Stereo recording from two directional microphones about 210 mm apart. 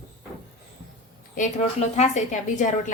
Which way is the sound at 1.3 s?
35° left (ahead or behind).